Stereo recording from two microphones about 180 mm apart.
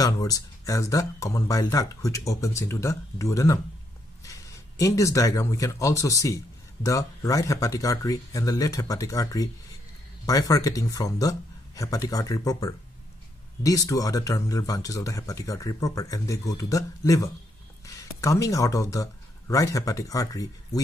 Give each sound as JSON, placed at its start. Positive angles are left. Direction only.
{"t": 0.0, "sound": "speech", "side_deg": 20}
{"t": 4.7, "sound": "speech", "side_deg": 15}